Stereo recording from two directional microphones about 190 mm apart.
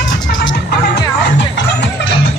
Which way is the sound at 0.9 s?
65° left (ahead or behind).